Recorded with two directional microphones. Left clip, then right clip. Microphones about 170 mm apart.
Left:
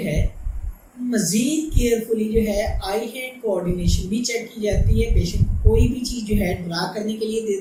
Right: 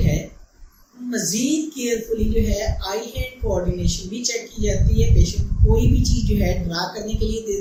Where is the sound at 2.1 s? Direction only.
10° right (ahead or behind).